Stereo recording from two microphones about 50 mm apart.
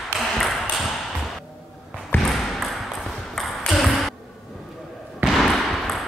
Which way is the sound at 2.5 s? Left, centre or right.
Centre.